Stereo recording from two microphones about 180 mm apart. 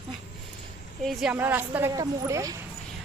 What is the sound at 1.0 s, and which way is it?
A woman's voice, centre (ahead or behind).